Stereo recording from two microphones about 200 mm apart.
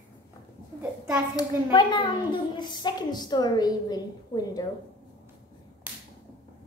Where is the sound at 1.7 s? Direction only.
25° left (ahead or behind).